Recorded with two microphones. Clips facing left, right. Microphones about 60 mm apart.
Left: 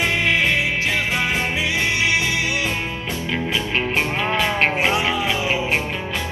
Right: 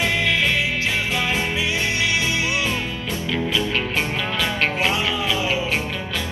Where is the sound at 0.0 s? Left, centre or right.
Left.